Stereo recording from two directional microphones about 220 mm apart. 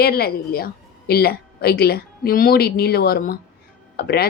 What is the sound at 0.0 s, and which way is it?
Speech, 45° left (ahead or behind).